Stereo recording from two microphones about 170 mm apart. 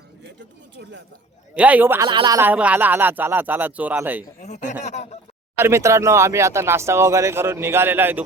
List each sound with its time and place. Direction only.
0.8 s speech: 90° right
1.5 s speech: 10° right (ahead or behind)
2.0 s speech: 25° right (ahead or behind)
2.4 s speech: 10° right (ahead or behind)
4.4 s speech: 45° left (ahead or behind)
4.8 s a sound: 40° left (ahead or behind)
5.5 s speech: 15° right (ahead or behind)